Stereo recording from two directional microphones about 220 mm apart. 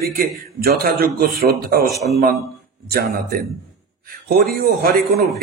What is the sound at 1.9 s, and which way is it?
Speech, centre (ahead or behind).